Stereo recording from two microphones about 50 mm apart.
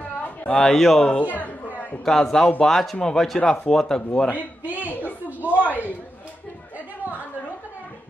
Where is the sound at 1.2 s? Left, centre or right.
Left.